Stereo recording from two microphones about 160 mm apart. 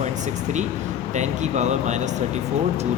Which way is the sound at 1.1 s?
45° right (ahead or behind).